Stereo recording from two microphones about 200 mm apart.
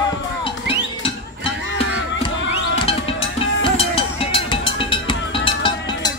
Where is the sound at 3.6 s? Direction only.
25° left (ahead or behind).